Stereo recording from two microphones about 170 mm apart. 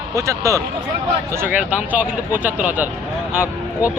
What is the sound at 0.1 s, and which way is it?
A man's voice, 15° right (ahead or behind).